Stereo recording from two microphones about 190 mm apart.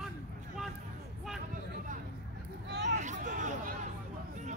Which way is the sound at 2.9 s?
40° right (ahead or behind).